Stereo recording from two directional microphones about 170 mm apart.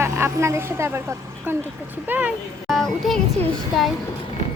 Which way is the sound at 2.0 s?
10° right (ahead or behind).